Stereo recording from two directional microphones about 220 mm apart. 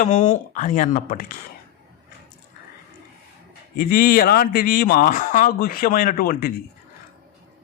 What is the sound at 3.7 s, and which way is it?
Speech, 40° left (ahead or behind).